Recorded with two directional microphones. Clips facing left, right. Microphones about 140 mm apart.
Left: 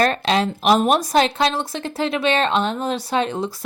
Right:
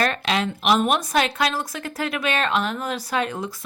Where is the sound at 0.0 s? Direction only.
35° left (ahead or behind).